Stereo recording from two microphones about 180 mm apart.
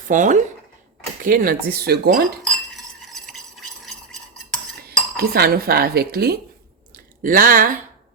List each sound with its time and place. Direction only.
0.1 s speech: 45° right (ahead or behind)
3.8 s stir: 5° left (ahead or behind)
4.8 s cutlery: 60° right (ahead or behind)
6.9 s speech: 50° right (ahead or behind)